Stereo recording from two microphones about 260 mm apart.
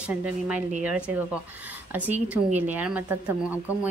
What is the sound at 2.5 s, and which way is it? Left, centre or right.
Speech, centre.